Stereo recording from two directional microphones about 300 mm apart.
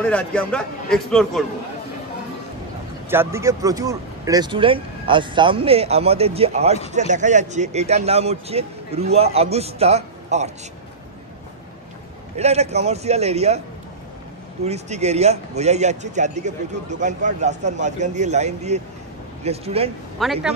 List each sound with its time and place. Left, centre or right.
0.0 s a man's voice: centre
3.1 s a man's voice: centre
12.4 s a man's voice: right
14.6 s a man's voice: right
20.2 s a man's voice: centre